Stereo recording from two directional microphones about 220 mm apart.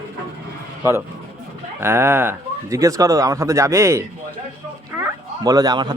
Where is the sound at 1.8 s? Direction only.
10° right (ahead or behind).